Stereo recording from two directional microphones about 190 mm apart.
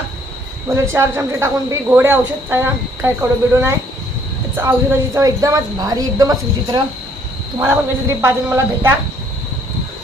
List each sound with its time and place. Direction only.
0.9 s speech: 15° right (ahead or behind)